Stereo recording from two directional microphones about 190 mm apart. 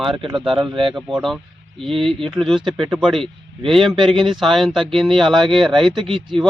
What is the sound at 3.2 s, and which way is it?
Speech, 30° right (ahead or behind).